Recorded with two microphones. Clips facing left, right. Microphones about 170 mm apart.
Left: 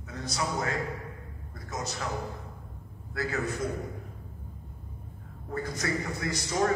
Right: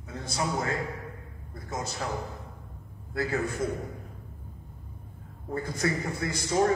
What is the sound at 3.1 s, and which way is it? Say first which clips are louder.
Speech: right 3 dB; 30° right (ahead or behind).